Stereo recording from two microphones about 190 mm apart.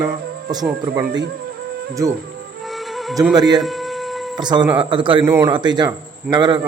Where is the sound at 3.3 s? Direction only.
20° right (ahead or behind).